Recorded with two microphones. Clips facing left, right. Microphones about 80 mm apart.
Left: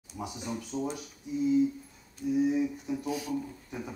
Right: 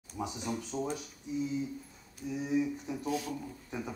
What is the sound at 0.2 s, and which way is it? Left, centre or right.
Speech, right.